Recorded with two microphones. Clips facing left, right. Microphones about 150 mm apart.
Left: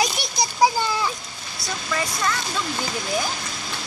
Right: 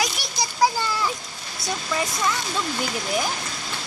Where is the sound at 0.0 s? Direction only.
15° left (ahead or behind).